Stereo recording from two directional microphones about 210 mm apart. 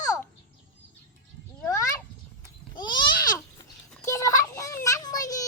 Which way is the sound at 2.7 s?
20° left (ahead or behind).